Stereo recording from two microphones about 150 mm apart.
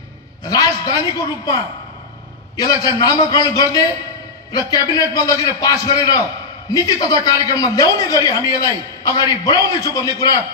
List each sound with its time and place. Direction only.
0.5 s a woman's voice: 25° left (ahead or behind)